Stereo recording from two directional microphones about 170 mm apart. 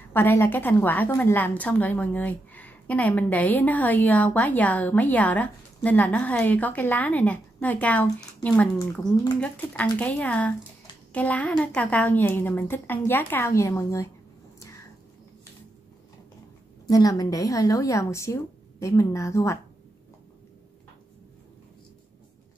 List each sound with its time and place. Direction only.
0.1 s a woman's voice: 10° left (ahead or behind)
16.8 s a woman's voice: 20° left (ahead or behind)